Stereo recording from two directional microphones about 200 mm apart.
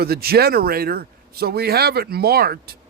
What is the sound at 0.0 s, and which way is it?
A man's voice, 50° right (ahead or behind).